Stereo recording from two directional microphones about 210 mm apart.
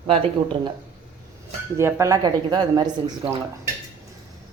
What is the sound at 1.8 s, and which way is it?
A woman's voice, 15° right (ahead or behind).